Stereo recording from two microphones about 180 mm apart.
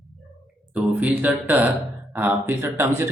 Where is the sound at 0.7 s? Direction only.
10° right (ahead or behind).